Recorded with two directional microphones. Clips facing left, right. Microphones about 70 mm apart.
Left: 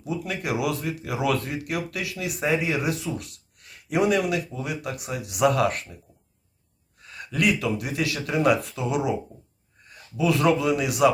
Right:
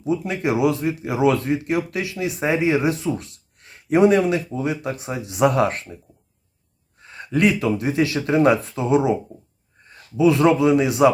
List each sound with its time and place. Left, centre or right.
0.0 s speech: right
7.0 s speech: right